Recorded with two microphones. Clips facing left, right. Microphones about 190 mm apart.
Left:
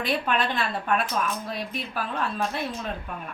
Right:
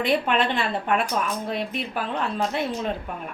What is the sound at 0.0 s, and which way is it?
A woman's voice, 25° right (ahead or behind).